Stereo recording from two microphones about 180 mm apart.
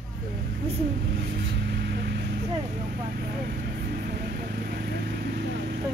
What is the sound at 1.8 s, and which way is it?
Vehicle, 70° right (ahead or behind).